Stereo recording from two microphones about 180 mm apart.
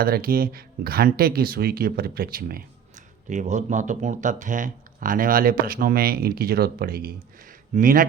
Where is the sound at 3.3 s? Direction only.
40° right (ahead or behind).